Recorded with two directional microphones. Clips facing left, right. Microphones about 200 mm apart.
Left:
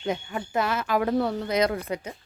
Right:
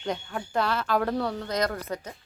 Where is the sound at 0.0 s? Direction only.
5° left (ahead or behind).